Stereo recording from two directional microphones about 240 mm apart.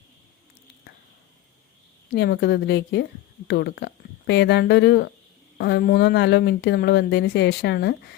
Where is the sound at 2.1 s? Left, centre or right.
Left.